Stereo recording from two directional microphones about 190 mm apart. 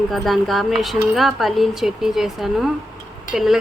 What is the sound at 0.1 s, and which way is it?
Speech, centre (ahead or behind).